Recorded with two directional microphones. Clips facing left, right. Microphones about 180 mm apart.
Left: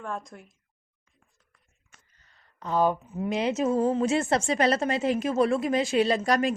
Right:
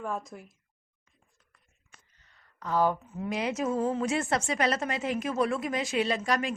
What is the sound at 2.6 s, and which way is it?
A woman's voice, 20° left (ahead or behind).